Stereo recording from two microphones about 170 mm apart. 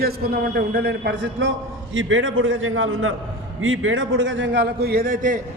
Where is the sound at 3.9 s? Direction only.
90° right; by 5.4 s 50° right (ahead or behind).